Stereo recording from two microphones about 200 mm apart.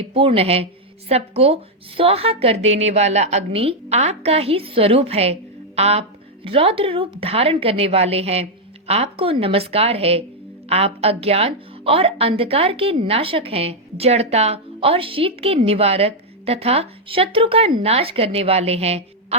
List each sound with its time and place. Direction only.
0.0 s a woman's voice: 30° right (ahead or behind)